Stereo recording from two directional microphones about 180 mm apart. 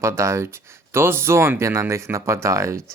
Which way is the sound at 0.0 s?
15° right (ahead or behind).